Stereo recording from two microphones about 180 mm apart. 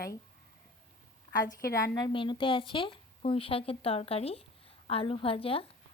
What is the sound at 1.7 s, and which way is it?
A woman's voice, 20° left (ahead or behind).